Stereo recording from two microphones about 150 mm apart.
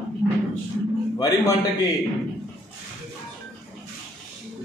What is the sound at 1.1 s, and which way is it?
Speech, 25° left (ahead or behind).